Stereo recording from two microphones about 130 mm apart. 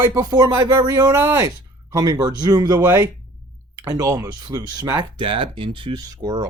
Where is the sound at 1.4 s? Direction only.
30° right (ahead or behind).